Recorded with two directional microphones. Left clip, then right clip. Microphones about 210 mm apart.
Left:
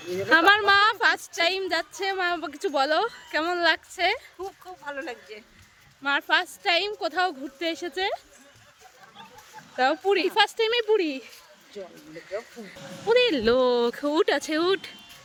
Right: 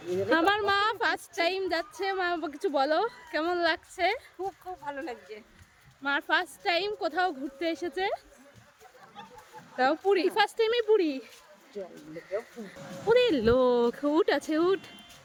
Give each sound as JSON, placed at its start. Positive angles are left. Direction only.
{"t": 0.1, "sound": "a woman's voice", "side_deg": 10}
{"t": 4.4, "sound": "speech", "side_deg": -20}
{"t": 6.0, "sound": "a woman's voice", "side_deg": 15}
{"t": 9.7, "sound": "a woman's voice", "side_deg": 10}
{"t": 13.1, "sound": "speech", "side_deg": 5}